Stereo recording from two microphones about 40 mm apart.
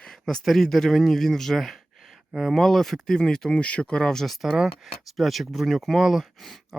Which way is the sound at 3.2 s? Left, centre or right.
Left.